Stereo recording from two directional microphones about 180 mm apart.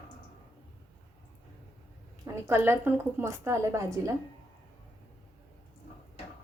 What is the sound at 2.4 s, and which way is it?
A woman's voice, 15° right (ahead or behind).